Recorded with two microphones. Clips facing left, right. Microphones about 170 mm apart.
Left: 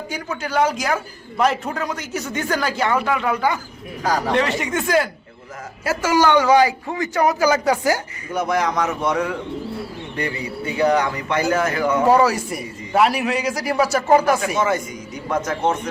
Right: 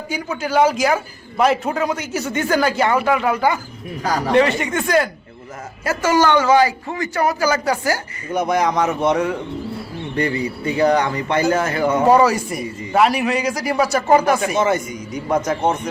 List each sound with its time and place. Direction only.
0.1 s a man's voice: 5° right (ahead or behind); by 8.0 s 20° left (ahead or behind)
8.3 s speech: 20° right (ahead or behind)
10.8 s speech: 35° right (ahead or behind)
12.0 s a man's voice: 5° left (ahead or behind)
14.4 s speech: 20° right (ahead or behind)